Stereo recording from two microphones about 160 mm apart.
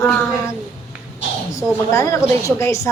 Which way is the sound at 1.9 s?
20° left (ahead or behind).